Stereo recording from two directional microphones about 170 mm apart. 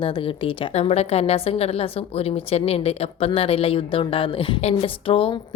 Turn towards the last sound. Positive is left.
turn(degrees=30)  # may be behind; listen again after turning